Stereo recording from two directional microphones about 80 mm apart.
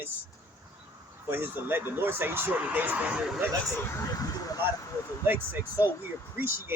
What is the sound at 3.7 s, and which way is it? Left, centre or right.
Speech, left.